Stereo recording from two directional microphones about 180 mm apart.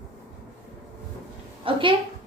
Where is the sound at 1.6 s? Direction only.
30° right (ahead or behind).